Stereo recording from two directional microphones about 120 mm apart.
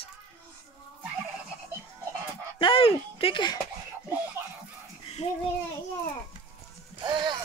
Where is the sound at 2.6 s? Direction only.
50° left (ahead or behind).